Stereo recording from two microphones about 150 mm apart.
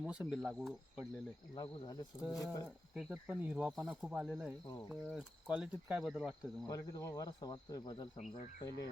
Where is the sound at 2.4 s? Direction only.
25° left (ahead or behind).